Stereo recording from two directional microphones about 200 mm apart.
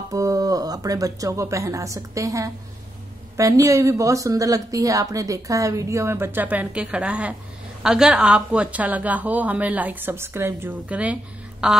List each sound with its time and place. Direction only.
0.1 s a woman's voice: 15° right (ahead or behind)